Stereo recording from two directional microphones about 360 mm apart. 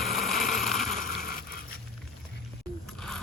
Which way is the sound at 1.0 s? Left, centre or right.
Left.